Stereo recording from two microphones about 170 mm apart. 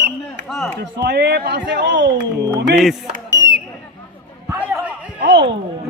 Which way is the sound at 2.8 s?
Centre (ahead or behind).